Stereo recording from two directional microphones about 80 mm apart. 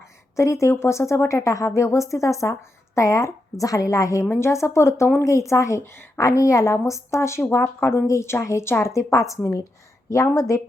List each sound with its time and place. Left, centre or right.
0.0 s speech: left
6.1 s a woman's voice: left